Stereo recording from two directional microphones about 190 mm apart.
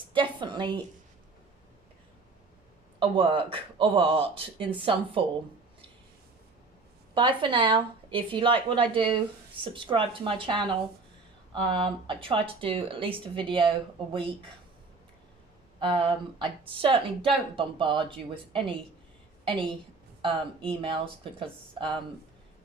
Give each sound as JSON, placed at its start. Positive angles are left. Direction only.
{"t": 0.1, "sound": "speech", "side_deg": -25}
{"t": 3.0, "sound": "speech", "side_deg": -25}
{"t": 7.1, "sound": "speech", "side_deg": -25}
{"t": 15.8, "sound": "speech", "side_deg": -25}